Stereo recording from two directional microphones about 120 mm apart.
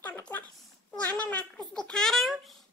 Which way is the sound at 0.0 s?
15° left (ahead or behind).